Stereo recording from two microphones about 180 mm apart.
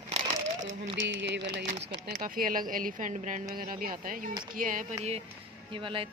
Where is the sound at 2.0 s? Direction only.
50° right (ahead or behind).